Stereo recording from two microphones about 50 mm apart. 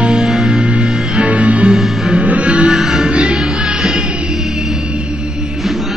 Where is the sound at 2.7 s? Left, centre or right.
Centre.